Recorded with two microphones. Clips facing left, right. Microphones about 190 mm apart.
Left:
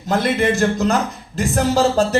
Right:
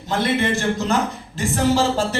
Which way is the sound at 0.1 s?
40° left (ahead or behind).